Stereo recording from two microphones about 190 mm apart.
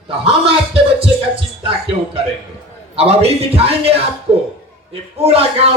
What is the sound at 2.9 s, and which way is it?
A man's voice, 30° right (ahead or behind).